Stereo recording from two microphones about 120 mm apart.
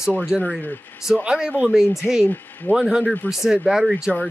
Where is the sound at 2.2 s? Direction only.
15° left (ahead or behind).